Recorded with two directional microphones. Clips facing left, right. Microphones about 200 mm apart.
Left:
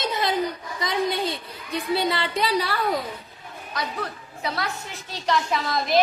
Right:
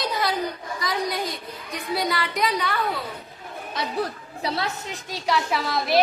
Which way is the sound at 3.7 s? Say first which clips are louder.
Right 3 dB; 30° right (ahead or behind).